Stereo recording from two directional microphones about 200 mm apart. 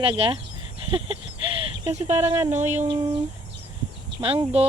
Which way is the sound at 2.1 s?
10° right (ahead or behind).